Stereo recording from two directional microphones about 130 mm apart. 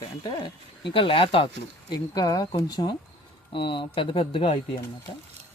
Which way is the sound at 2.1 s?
30° left (ahead or behind).